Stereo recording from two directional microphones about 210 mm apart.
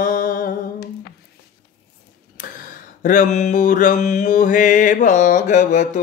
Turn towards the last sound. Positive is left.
turn(degrees=35)  # may be behind; listen again after turning